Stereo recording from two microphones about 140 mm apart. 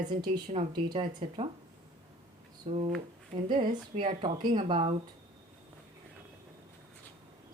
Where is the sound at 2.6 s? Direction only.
45° right (ahead or behind).